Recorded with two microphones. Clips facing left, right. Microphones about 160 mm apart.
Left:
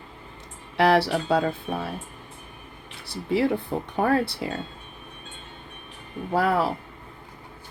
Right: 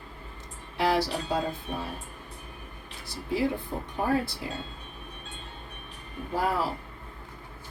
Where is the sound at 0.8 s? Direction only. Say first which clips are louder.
Left 6 dB; 65° left (ahead or behind).